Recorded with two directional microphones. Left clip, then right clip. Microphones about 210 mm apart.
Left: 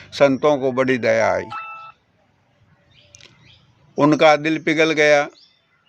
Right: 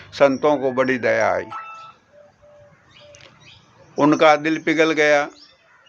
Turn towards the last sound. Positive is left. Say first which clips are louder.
# left 1 dB
turn(degrees=45)  # may be behind; listen again after turning